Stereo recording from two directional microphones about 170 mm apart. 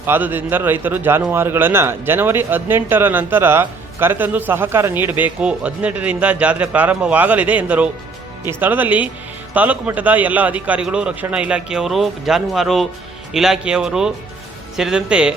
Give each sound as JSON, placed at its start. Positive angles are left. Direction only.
{"t": 0.0, "sound": "speech", "side_deg": -10}